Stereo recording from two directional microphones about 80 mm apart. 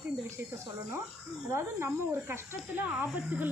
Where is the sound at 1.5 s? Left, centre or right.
Right.